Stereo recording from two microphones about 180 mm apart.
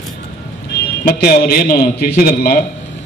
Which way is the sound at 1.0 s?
55° left (ahead or behind).